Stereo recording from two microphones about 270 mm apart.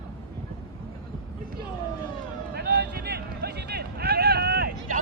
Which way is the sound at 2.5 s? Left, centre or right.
Right.